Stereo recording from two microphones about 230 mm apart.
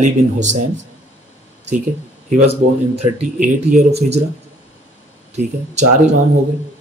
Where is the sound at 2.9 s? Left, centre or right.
Right.